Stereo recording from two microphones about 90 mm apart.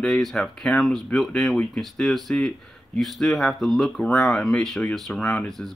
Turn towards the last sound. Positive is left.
turn(degrees=5)  # may be behind; listen again after turning